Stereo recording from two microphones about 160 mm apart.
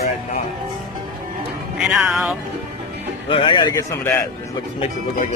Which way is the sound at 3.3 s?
30° left (ahead or behind).